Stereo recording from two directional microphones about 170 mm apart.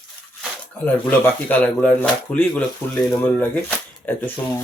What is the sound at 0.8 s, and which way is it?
Speech, 10° left (ahead or behind).